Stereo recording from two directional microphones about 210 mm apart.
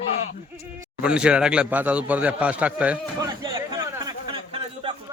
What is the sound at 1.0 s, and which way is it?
A man's voice, 5° right (ahead or behind).